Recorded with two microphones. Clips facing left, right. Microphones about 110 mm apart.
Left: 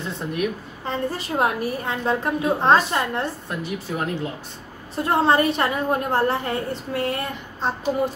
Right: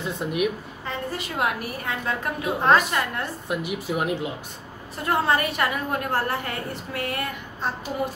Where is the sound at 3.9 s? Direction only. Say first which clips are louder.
Right 1 dB; 10° right (ahead or behind).